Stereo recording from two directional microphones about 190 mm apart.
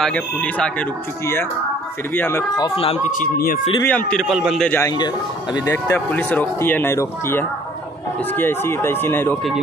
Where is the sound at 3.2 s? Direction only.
45° left (ahead or behind).